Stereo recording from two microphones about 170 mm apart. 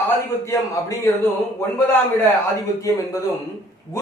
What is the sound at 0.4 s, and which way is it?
Speech, 20° left (ahead or behind).